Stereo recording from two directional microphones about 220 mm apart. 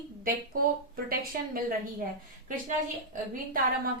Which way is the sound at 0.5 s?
40° right (ahead or behind).